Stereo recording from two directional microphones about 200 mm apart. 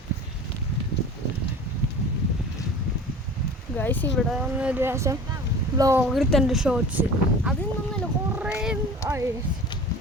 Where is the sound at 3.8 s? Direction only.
10° left (ahead or behind); by 6.0 s 15° right (ahead or behind).